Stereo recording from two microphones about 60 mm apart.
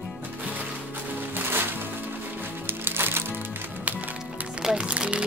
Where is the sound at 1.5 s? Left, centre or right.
Right.